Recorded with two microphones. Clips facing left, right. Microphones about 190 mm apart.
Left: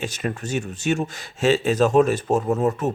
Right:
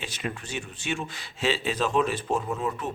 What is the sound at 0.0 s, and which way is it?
Speech, 45° left (ahead or behind).